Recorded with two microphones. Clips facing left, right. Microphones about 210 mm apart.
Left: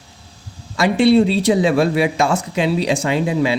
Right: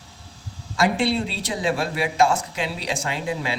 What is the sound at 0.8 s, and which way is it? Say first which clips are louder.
Speech: left 9 dB; 65° left (ahead or behind).